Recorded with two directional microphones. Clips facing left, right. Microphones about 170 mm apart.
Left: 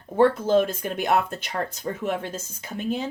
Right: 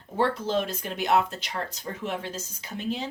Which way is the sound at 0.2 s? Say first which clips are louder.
Left 7 dB; 50° left (ahead or behind).